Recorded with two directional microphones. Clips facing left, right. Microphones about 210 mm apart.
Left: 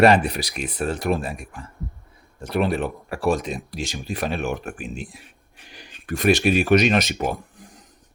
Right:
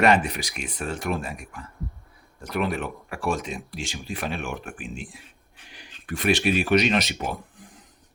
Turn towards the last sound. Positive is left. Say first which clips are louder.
# left 4 dB
turn(degrees=45)  # may be behind; listen again after turning